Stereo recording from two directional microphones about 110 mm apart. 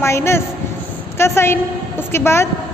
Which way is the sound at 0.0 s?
25° left (ahead or behind).